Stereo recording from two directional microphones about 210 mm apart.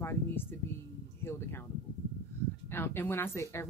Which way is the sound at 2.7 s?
10° left (ahead or behind).